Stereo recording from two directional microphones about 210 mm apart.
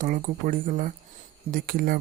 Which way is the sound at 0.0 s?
40° right (ahead or behind).